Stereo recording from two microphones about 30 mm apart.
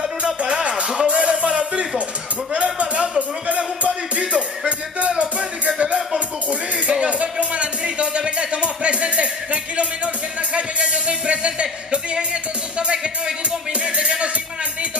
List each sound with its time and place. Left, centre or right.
0.2 s music: right
2.6 s a sound: right
3.2 s music: right